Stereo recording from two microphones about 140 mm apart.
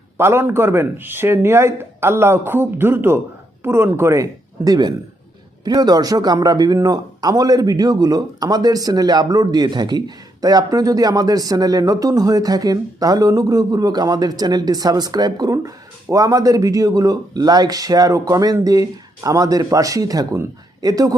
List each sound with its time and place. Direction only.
0.2 s speech: 20° right (ahead or behind)